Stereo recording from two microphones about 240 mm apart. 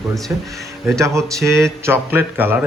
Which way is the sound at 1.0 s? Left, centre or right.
Centre.